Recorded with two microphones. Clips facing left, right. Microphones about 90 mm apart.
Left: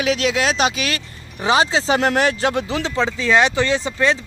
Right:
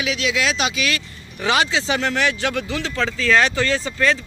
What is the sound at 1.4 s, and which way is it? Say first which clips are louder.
Speech: left 3 dB; 30° left (ahead or behind).